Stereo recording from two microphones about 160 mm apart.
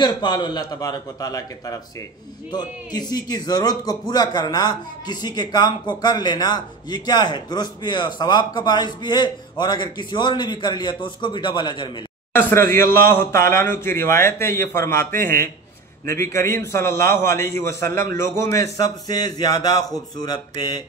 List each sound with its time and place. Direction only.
0.0 s a man's voice: 25° left (ahead or behind)
12.4 s a man's voice: 15° left (ahead or behind)